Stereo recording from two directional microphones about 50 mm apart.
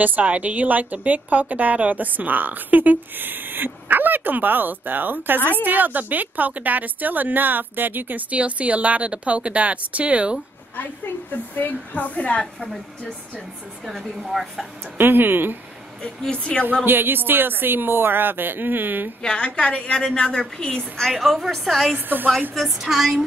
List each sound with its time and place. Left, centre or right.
0.0 s a woman's voice: right
8.3 s a woman's voice: right
11.5 s a woman's voice: left
13.8 s a woman's voice: centre
15.0 s speech: right
16.3 s a woman's voice: left
16.8 s speech: right
19.2 s a woman's voice: centre
21.0 s a woman's voice: centre
21.9 s a woman's voice: right
22.5 s a woman's voice: centre